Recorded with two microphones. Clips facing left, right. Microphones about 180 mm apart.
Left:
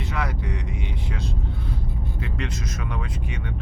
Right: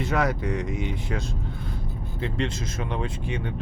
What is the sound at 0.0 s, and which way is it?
Speech, 45° right (ahead or behind).